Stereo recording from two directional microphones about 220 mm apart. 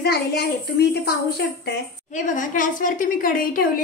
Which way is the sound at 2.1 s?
35° left (ahead or behind).